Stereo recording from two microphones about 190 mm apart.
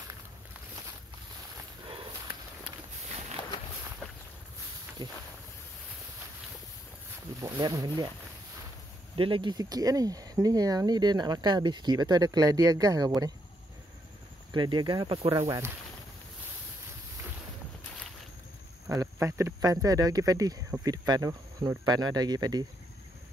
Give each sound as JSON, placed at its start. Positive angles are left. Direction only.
{"t": 5.0, "sound": "speech", "side_deg": -25}
{"t": 7.3, "sound": "speech", "side_deg": -20}
{"t": 9.1, "sound": "speech", "side_deg": -25}
{"t": 14.5, "sound": "speech", "side_deg": -25}
{"t": 18.9, "sound": "speech", "side_deg": -15}